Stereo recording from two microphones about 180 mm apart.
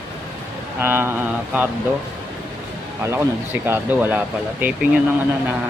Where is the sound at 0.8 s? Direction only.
15° right (ahead or behind).